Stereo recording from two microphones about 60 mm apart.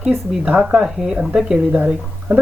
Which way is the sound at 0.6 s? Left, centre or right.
Centre.